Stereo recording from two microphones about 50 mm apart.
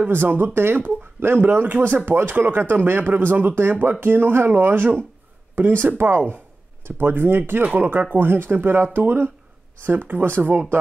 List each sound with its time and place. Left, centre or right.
0.0 s speech: right